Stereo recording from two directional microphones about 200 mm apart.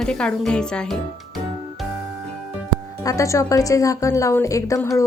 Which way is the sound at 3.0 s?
15° left (ahead or behind).